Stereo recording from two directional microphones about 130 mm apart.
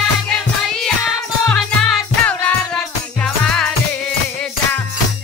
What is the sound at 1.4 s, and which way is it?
Music, 5° left (ahead or behind).